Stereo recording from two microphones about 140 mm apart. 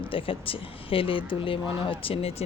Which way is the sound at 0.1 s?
40° left (ahead or behind).